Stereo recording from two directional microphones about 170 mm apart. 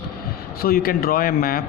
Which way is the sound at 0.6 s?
60° left (ahead or behind).